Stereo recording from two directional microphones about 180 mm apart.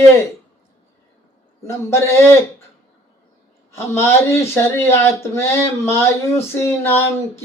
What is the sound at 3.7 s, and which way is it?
Speech, 15° left (ahead or behind).